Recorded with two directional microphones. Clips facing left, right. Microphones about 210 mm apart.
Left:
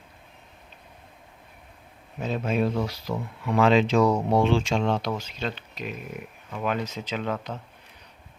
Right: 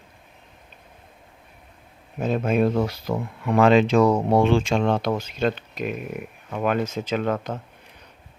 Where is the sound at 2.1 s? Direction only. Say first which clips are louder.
Right 5 dB; 50° right (ahead or behind).